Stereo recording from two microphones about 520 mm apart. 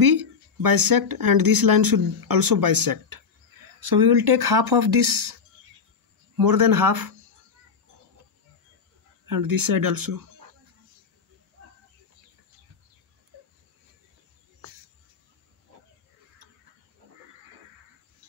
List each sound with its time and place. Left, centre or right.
0.0 s speech: right
6.3 s speech: right
9.2 s speech: right